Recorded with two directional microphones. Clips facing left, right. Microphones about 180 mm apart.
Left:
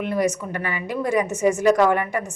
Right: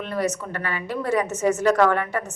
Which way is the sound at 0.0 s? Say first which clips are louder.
Left 3 dB; 15° left (ahead or behind).